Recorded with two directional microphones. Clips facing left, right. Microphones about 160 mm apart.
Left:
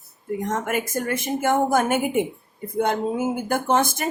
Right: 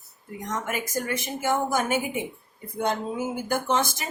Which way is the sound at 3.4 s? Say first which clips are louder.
Left 1 dB; 55° left (ahead or behind).